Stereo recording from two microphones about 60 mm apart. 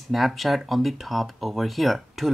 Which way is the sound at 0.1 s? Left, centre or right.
Centre.